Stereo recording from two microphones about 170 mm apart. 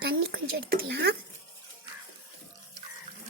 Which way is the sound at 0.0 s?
65° right (ahead or behind).